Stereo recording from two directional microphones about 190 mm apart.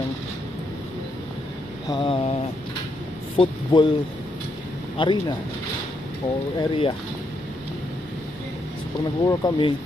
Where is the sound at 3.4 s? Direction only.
25° left (ahead or behind).